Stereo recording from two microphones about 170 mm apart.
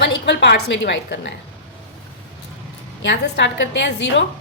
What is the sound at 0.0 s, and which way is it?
A woman's voice, 90° left.